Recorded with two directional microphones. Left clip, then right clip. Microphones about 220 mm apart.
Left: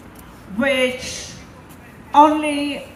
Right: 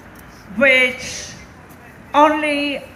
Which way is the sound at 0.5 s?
15° right (ahead or behind).